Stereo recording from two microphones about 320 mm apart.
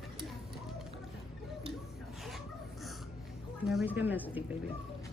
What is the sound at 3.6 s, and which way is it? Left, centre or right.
Speech, centre.